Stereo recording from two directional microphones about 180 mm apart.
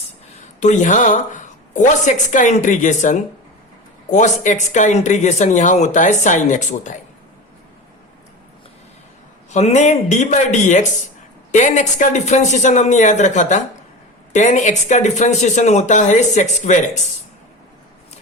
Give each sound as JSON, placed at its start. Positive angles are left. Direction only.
{"t": 0.6, "sound": "speech", "side_deg": 40}
{"t": 9.5, "sound": "speech", "side_deg": 40}